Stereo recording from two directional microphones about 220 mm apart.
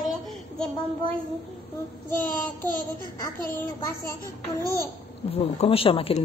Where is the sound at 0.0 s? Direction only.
Centre (ahead or behind).